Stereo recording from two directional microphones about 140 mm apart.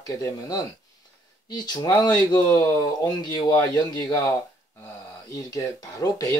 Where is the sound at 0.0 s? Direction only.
25° left (ahead or behind).